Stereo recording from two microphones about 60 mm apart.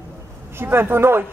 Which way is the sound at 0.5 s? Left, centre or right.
Right.